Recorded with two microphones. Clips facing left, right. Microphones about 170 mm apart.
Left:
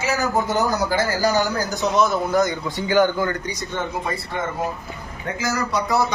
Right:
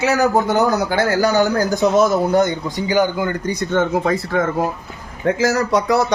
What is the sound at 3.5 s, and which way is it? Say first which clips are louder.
A man's voice: right 9 dB; 75° right (ahead or behind).